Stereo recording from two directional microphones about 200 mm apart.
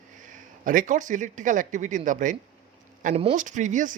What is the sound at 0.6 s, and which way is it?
Speech, 40° right (ahead or behind).